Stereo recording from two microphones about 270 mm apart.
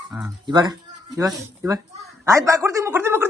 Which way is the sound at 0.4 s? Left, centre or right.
Centre.